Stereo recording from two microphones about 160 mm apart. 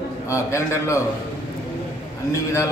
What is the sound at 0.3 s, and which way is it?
Speech, 20° left (ahead or behind).